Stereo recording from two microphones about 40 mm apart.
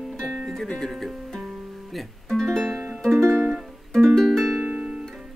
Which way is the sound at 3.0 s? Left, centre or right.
Centre.